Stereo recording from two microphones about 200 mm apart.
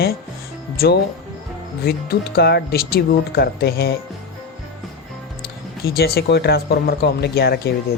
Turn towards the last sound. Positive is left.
turn(degrees=50)  # may be behind; listen again after turning